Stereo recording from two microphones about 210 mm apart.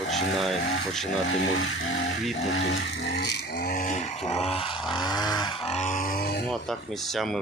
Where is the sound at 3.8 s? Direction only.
35° left (ahead or behind).